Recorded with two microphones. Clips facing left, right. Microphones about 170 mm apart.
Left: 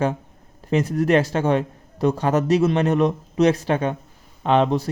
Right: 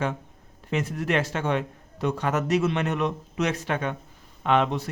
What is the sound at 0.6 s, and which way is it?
Speech, 40° left (ahead or behind).